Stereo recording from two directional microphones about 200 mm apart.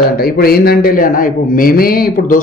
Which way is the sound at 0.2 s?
50° left (ahead or behind).